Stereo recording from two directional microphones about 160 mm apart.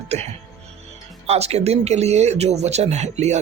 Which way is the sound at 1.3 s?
40° right (ahead or behind).